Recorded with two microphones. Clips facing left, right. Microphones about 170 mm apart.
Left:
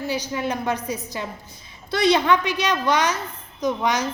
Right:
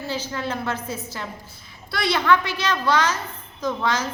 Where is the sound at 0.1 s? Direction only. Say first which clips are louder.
Left 1 dB; 15° left (ahead or behind).